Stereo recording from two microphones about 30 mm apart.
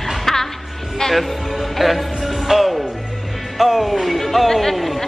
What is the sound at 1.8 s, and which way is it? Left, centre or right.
Music, centre.